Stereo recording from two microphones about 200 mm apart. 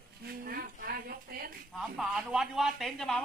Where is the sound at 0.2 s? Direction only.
50° right (ahead or behind).